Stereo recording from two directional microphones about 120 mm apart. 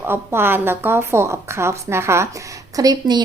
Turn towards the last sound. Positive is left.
turn(degrees=-30)  # may be behind; listen again after turning